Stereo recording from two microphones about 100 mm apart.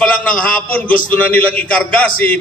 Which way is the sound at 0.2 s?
15° left (ahead or behind).